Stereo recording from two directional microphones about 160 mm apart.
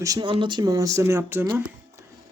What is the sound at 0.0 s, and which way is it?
Speech, 20° right (ahead or behind).